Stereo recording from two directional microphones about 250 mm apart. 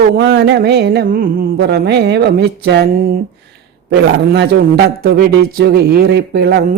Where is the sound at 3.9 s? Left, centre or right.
Right.